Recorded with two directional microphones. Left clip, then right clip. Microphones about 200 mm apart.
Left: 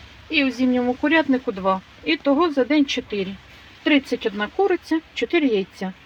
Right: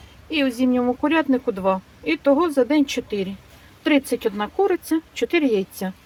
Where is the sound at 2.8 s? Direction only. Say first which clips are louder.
Even; 25° right (ahead or behind).